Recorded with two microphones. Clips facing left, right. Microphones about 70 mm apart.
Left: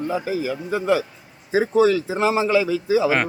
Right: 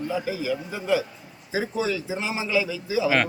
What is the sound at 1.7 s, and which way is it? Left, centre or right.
A man's voice, left.